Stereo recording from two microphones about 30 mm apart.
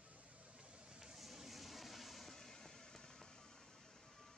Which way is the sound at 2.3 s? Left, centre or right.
Centre.